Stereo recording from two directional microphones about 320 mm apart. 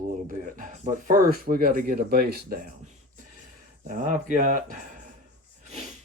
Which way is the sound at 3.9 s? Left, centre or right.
Right.